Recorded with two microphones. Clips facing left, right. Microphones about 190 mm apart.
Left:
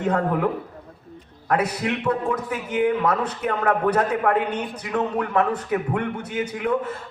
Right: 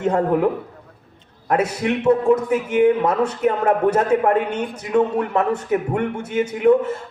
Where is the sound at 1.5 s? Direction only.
25° right (ahead or behind).